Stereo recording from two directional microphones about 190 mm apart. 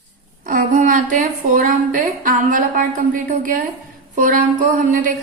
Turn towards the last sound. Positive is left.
turn(degrees=-45)  # may be behind; listen again after turning